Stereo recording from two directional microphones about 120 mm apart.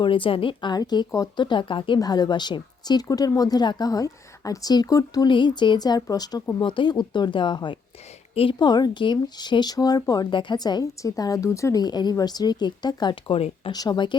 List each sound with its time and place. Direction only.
0.0 s speech: 45° left (ahead or behind)
13.7 s speech: 35° left (ahead or behind)